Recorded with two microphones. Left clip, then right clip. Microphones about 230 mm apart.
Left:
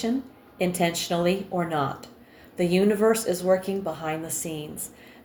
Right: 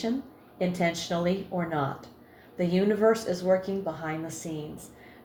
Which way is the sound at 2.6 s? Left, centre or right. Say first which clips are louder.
Left 3 dB; left.